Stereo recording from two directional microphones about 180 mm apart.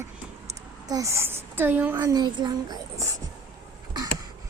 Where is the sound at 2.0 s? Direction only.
20° right (ahead or behind).